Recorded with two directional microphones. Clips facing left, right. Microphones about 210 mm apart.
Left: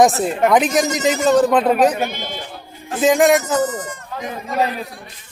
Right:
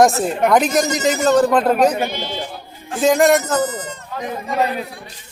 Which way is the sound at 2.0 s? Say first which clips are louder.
Right 1 dB; 50° left (ahead or behind).